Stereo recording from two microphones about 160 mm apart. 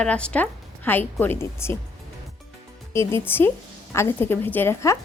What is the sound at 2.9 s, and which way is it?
A woman's voice, 15° left (ahead or behind).